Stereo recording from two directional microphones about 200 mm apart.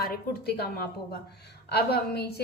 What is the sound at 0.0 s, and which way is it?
A woman's voice, 50° left (ahead or behind).